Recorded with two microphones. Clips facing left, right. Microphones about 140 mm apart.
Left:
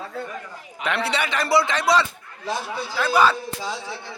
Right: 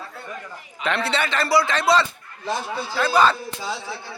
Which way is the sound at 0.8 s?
10° left (ahead or behind).